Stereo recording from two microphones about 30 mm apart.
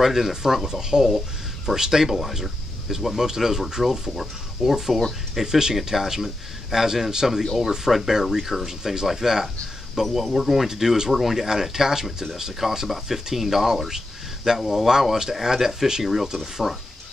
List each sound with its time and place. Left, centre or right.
0.0 s speech: centre
2.9 s speech: centre
3.2 s speech: centre